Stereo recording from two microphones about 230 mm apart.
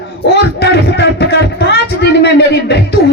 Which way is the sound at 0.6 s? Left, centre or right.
Left.